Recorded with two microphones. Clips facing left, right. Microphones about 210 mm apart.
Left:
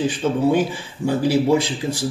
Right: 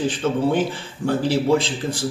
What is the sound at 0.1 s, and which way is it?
Speech, 10° left (ahead or behind).